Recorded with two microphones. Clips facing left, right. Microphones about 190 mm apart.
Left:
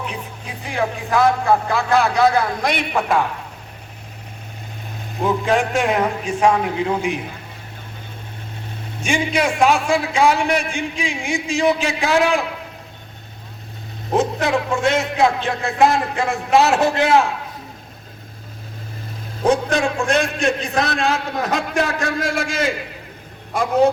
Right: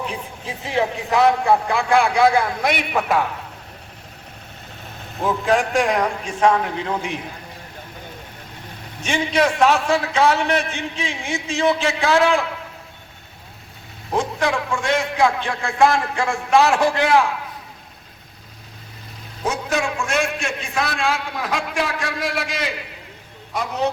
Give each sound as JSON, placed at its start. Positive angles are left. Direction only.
{"t": 0.1, "sound": "a man's voice", "side_deg": -25}
{"t": 5.2, "sound": "a man's voice", "side_deg": 0}
{"t": 9.0, "sound": "a man's voice", "side_deg": 10}
{"t": 14.1, "sound": "a man's voice", "side_deg": 20}
{"t": 19.5, "sound": "a man's voice", "side_deg": 35}